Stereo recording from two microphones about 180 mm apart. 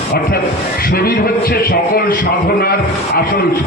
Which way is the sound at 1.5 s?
55° left (ahead or behind).